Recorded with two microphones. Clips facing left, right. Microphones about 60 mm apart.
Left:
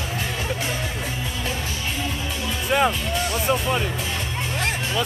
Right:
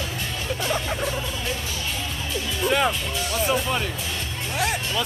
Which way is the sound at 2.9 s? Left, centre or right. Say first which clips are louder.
Left 2 dB; centre.